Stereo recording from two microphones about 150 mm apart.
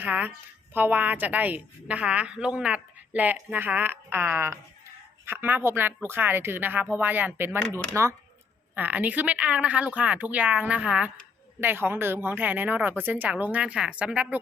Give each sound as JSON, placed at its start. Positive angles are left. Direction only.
{"t": 0.0, "sound": "a woman's voice", "side_deg": -10}